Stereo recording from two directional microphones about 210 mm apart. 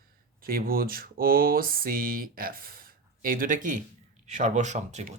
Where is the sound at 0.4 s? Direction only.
45° right (ahead or behind).